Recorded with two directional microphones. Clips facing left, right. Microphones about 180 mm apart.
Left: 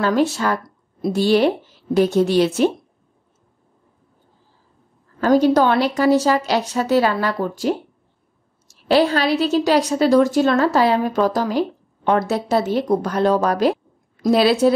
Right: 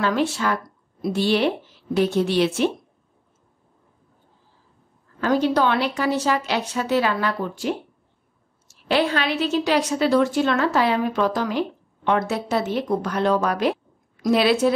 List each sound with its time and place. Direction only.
0.0 s a woman's voice: 40° left (ahead or behind)
5.2 s a woman's voice: 40° left (ahead or behind)